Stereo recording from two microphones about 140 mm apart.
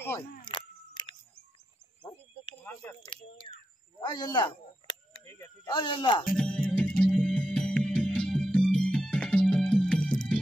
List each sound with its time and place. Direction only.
0.5 s camera: 35° left (ahead or behind)
2.6 s speech: 20° left (ahead or behind)
3.1 s speech: 35° left (ahead or behind)
5.2 s speech: 20° left (ahead or behind)
5.7 s speech: 35° left (ahead or behind)
6.3 s music: 5° left (ahead or behind)